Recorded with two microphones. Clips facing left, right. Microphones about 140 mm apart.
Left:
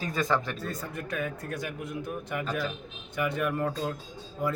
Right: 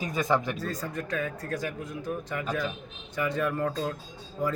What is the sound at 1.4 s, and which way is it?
Speech, 15° left (ahead or behind).